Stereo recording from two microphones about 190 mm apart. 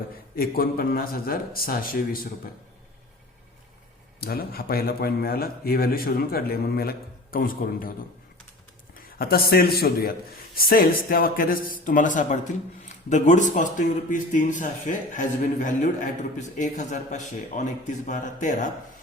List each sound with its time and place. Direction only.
0.3 s a man's voice: 50° left (ahead or behind)
4.2 s a man's voice: 50° left (ahead or behind)
9.0 s a man's voice: 50° left (ahead or behind)